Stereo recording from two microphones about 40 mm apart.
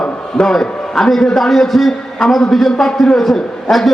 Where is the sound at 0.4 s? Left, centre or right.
Centre.